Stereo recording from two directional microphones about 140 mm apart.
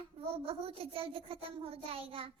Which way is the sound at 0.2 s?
45° right (ahead or behind).